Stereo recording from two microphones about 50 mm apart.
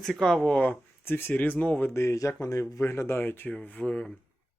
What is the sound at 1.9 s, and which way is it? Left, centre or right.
A man's voice, left.